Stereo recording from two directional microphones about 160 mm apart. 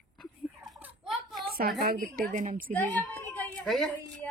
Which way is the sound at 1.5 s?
70° right (ahead or behind).